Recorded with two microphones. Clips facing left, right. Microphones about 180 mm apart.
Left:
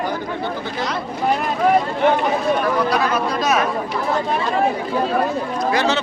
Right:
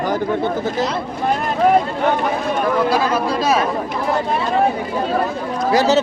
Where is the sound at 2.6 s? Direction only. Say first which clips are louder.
Right 2 dB; 25° right (ahead or behind).